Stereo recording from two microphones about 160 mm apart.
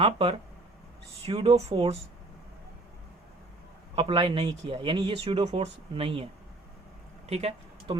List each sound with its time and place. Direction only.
0.0 s speech: 35° right (ahead or behind)
3.9 s speech: 35° right (ahead or behind)
7.3 s speech: 40° right (ahead or behind)